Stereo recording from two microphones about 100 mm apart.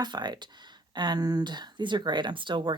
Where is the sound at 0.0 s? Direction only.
45° right (ahead or behind).